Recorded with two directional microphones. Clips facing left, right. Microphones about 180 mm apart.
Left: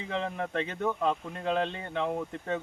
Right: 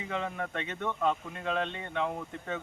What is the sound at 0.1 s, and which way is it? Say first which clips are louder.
Speech: left 3 dB; 30° left (ahead or behind).